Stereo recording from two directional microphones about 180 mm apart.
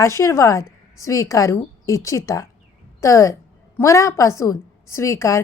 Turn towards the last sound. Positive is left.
turn(degrees=15)  # may be behind; listen again after turning